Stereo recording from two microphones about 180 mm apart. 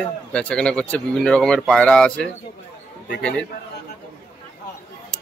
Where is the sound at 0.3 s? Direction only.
5° left (ahead or behind).